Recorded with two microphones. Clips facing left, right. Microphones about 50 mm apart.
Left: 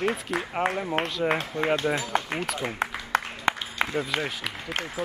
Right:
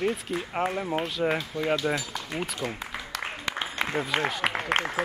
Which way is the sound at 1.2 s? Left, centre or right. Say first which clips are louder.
Left 1 dB; centre.